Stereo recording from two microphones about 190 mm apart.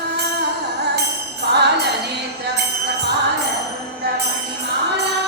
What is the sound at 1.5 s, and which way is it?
Music, 60° right (ahead or behind).